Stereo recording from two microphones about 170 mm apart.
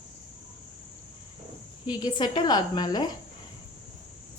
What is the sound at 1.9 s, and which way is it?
A woman's voice, 25° left (ahead or behind).